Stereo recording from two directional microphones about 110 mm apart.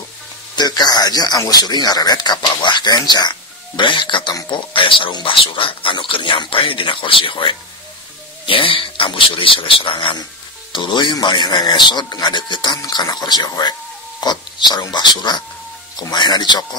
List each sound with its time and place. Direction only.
0.6 s speech: 40° left (ahead or behind)